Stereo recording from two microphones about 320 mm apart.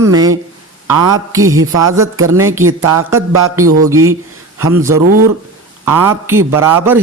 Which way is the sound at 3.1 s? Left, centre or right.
Centre.